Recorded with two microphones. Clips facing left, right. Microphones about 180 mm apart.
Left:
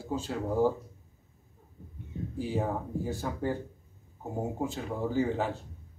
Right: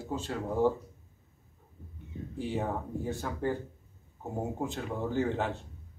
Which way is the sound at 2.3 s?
5° left (ahead or behind).